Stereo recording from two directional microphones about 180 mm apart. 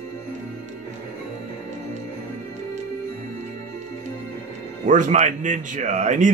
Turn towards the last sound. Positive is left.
turn(degrees=-45)  # may be behind; listen again after turning